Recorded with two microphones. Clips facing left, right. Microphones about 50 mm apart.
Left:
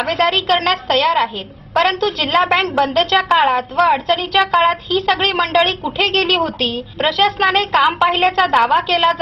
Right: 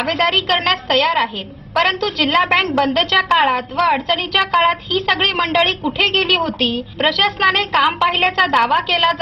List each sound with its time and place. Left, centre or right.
0.0 s a woman's voice: centre
0.3 s a woman's voice: right
0.9 s a woman's voice: centre